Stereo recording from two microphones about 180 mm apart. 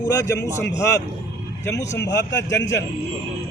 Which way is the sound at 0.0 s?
20° left (ahead or behind).